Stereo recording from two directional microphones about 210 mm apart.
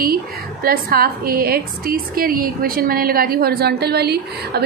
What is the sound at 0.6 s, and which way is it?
A woman's voice, 45° right (ahead or behind).